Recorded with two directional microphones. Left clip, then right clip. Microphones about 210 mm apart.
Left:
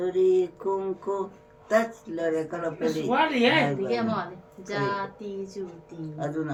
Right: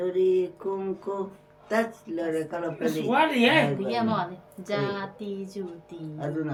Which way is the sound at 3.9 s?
55° right (ahead or behind).